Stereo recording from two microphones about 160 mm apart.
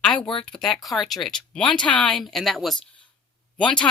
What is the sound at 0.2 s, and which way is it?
Speech, 35° left (ahead or behind).